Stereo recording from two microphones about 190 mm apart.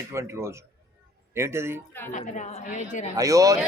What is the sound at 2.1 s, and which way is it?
Speech, 40° left (ahead or behind).